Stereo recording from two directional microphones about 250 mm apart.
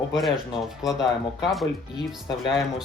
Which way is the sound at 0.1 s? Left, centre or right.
Centre.